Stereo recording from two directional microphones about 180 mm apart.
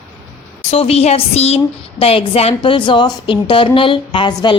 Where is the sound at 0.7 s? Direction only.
35° left (ahead or behind).